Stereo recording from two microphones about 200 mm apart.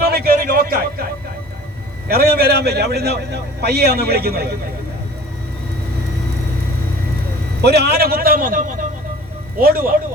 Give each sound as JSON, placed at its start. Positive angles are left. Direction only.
{"t": 0.0, "sound": "a sound", "side_deg": -50}
{"t": 2.0, "sound": "a man's voice", "side_deg": -50}
{"t": 7.6, "sound": "a man's voice", "side_deg": -55}